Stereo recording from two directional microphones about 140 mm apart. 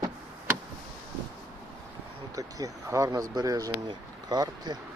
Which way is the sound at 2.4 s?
25° right (ahead or behind).